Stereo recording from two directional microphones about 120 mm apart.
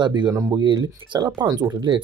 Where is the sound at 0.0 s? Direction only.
40° right (ahead or behind).